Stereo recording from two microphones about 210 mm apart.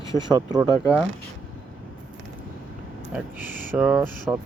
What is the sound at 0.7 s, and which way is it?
Speech, 15° left (ahead or behind).